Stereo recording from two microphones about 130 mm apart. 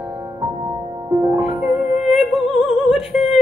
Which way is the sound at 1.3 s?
5° right (ahead or behind).